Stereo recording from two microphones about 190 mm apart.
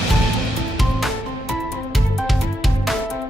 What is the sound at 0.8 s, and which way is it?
Music, centre (ahead or behind).